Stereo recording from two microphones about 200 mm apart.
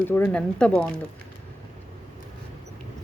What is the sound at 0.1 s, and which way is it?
Speech, 10° left (ahead or behind).